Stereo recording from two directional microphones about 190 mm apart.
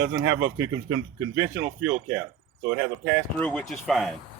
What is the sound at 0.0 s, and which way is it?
Speech, 75° right (ahead or behind).